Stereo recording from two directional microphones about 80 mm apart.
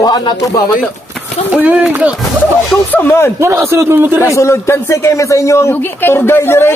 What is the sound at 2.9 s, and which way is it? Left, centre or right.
Speech, left.